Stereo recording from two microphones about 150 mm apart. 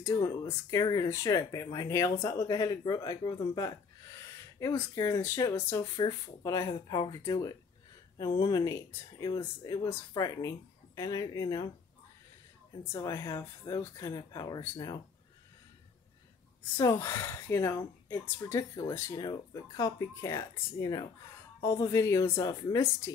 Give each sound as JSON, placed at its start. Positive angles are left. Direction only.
{"t": 0.0, "sound": "speech", "side_deg": 20}
{"t": 12.9, "sound": "speech", "side_deg": 20}
{"t": 16.7, "sound": "speech", "side_deg": 20}